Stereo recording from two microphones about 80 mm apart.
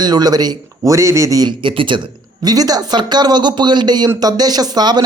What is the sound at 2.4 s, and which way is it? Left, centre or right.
Speech, right.